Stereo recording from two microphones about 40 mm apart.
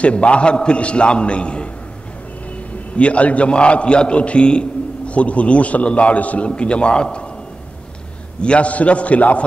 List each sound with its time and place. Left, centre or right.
0.0 s a man's voice: left
3.0 s a man's voice: left
8.4 s a man's voice: left